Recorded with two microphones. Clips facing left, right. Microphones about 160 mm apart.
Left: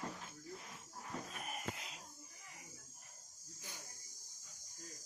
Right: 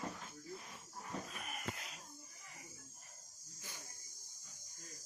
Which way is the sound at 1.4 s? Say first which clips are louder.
Left 2 dB; 35° left (ahead or behind).